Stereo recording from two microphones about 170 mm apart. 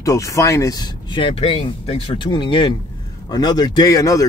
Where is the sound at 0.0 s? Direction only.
20° left (ahead or behind).